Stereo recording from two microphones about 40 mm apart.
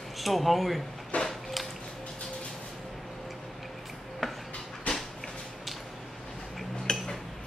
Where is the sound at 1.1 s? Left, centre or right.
Left.